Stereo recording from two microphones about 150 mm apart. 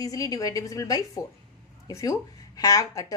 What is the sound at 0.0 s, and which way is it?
A woman's voice, 25° left (ahead or behind).